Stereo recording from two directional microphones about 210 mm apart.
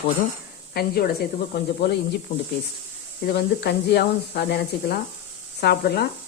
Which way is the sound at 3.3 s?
50° left (ahead or behind).